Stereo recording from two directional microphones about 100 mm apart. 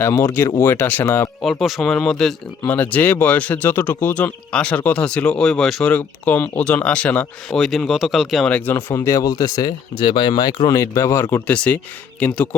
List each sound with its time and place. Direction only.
0.0 s speech: 25° left (ahead or behind)
1.4 s speech: centre (ahead or behind)
2.6 s speech: 15° left (ahead or behind)
5.9 s speech: 15° left (ahead or behind)
7.5 s speech: centre (ahead or behind)
8.4 s speech: 15° left (ahead or behind)
9.0 s speech: 35° left (ahead or behind)
10.7 s speech: 35° left (ahead or behind); by 12.5 s 15° left (ahead or behind)